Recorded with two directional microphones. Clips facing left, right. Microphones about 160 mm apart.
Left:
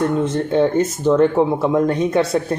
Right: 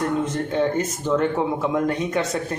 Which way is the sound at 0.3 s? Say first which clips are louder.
Left 5 dB; 30° left (ahead or behind).